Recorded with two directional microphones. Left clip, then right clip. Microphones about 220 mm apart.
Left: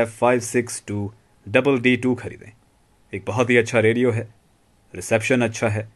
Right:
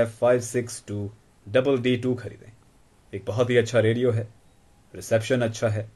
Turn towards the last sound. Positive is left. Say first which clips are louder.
# left 3 dB
turn(degrees=40)  # may be behind; listen again after turning